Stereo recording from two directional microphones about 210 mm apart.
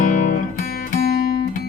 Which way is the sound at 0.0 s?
40° left (ahead or behind).